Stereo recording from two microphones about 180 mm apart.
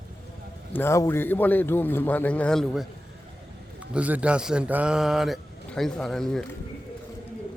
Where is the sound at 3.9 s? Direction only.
10° right (ahead or behind).